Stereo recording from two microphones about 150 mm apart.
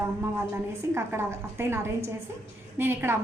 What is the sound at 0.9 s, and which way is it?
A woman's voice, 15° right (ahead or behind).